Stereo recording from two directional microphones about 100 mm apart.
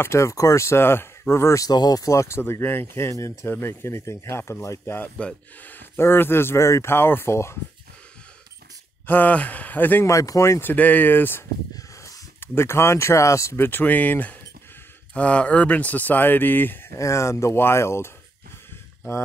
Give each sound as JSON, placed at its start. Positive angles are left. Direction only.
{"t": 0.0, "sound": "speech", "side_deg": 30}
{"t": 1.7, "sound": "speech", "side_deg": 40}
{"t": 9.0, "sound": "speech", "side_deg": 20}
{"t": 10.0, "sound": "speech", "side_deg": 35}
{"t": 11.7, "sound": "a sound", "side_deg": 35}
{"t": 12.4, "sound": "speech", "side_deg": 25}